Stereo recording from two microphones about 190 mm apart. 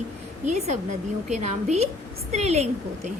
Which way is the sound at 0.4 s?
35° right (ahead or behind).